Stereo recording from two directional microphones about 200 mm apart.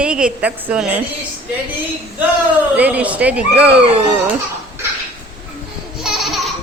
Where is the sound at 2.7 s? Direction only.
5° right (ahead or behind).